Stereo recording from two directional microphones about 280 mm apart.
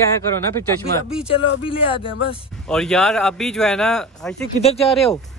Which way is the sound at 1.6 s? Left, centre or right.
Centre.